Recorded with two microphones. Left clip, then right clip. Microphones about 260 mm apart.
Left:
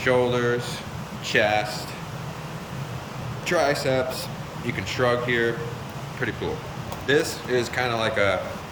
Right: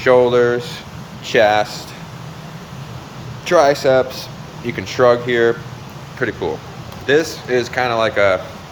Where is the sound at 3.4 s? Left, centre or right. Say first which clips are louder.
Right 10 dB; centre.